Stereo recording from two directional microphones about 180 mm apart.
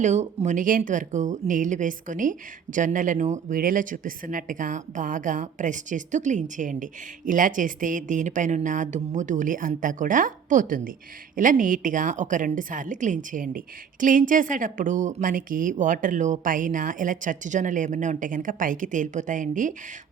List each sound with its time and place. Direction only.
0.0 s speech: 40° right (ahead or behind)